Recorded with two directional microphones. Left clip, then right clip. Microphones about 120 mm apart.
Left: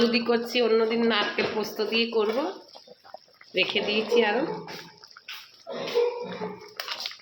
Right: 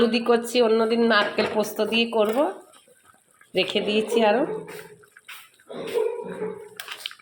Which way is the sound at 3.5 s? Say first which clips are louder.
Right 2 dB; 75° right (ahead or behind).